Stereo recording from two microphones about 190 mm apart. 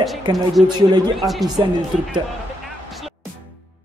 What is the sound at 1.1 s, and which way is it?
Speech, centre (ahead or behind).